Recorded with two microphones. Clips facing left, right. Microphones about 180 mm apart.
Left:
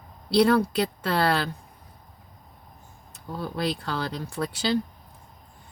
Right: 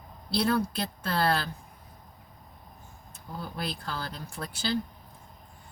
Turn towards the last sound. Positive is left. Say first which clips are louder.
# left 6 dB
turn(degrees=75)  # may be behind; listen again after turning